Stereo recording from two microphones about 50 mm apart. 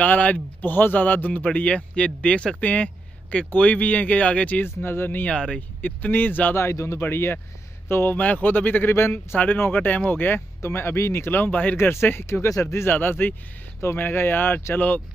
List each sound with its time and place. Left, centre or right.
0.0 s speech: left
4.6 s speech: left
5.2 s speech: centre
5.8 s speech: left
6.5 s speech: left
7.0 s speech: left
8.2 s speech: left
8.9 s speech: left
9.7 s speech: left
10.6 s speech: left
11.2 s speech: left
11.7 s speech: left
12.9 s speech: left